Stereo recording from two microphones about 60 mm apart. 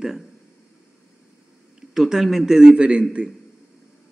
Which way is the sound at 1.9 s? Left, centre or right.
Centre.